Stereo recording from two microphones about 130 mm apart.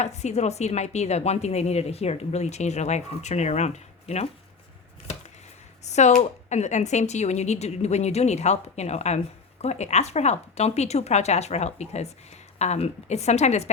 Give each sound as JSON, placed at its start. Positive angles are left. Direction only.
{"t": 0.0, "sound": "speech", "side_deg": 60}
{"t": 5.8, "sound": "speech", "side_deg": 60}